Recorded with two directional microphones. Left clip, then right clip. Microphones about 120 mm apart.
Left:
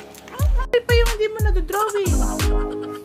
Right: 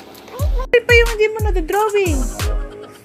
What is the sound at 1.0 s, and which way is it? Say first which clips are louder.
Speech: right 5 dB; centre (ahead or behind).